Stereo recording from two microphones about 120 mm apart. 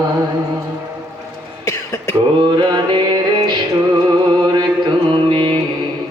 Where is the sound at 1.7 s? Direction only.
25° left (ahead or behind).